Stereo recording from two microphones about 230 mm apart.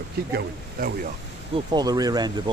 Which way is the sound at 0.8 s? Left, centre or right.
Right.